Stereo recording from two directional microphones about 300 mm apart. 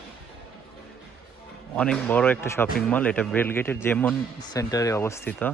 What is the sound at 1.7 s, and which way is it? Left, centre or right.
A man's voice, centre.